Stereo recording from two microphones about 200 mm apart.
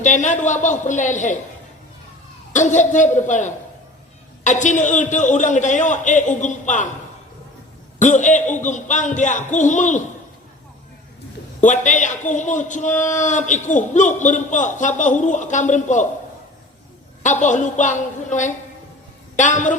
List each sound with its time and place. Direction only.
0.0 s a man's voice: 40° left (ahead or behind)
2.5 s a man's voice: 40° left (ahead or behind)
8.0 s a man's voice: 40° left (ahead or behind)
11.6 s a man's voice: 40° left (ahead or behind)
17.2 s a man's voice: 40° left (ahead or behind)